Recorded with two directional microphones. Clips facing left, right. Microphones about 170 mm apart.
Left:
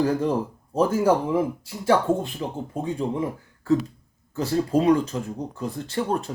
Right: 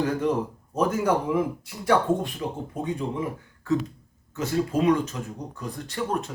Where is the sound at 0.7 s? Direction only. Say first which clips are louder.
Left 3 dB; 30° left (ahead or behind).